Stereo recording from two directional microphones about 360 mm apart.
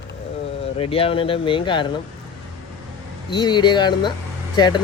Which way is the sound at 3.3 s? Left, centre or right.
Centre.